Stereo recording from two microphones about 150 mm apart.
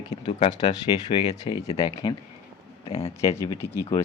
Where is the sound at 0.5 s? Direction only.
25° left (ahead or behind).